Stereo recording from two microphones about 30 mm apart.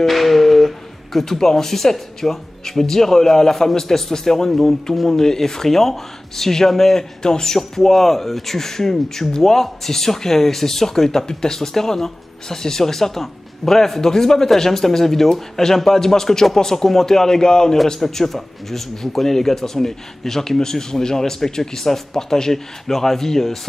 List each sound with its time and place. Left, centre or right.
0.0 s music: centre
1.2 s a man's voice: centre
5.1 s a man's voice: centre
18.0 s a man's voice: centre